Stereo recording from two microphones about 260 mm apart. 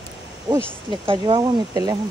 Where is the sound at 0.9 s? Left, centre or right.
Centre.